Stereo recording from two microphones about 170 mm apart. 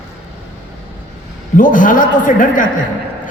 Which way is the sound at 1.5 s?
50° left (ahead or behind).